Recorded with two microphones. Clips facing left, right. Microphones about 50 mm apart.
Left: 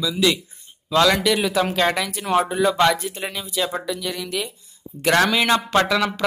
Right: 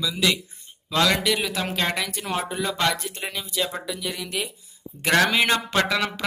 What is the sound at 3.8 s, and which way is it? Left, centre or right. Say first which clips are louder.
Speech: left 4 dB; centre.